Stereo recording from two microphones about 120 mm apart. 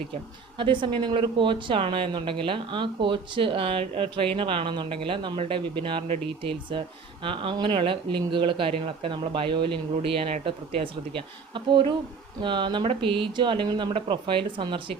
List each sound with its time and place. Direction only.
0.6 s speech: 40° right (ahead or behind)
7.3 s speech: 45° right (ahead or behind)